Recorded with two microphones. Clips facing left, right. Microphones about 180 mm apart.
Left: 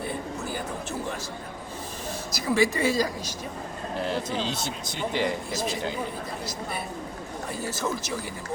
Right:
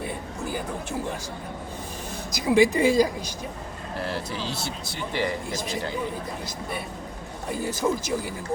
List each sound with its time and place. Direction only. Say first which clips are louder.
2.5 s a woman's voice: right 4 dB; 15° right (ahead or behind)
4.0 s speech: left 2 dB; 20° left (ahead or behind)
7.7 s a woman's voice: right 6 dB; 10° right (ahead or behind)